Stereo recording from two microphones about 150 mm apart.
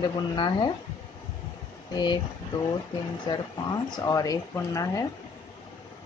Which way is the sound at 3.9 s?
25° left (ahead or behind).